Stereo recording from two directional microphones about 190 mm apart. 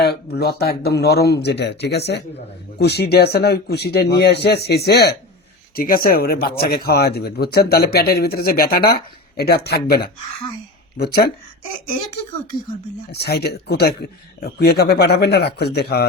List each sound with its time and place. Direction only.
0.0 s speech: 55° left (ahead or behind)
13.1 s speech: 60° left (ahead or behind)